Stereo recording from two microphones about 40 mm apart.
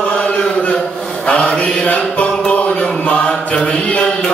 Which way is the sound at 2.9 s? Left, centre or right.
Left.